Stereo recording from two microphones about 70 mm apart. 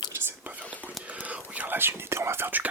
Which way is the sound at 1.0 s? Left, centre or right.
Right.